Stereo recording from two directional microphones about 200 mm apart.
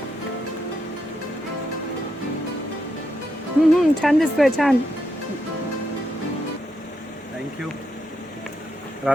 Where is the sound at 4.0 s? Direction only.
Centre (ahead or behind).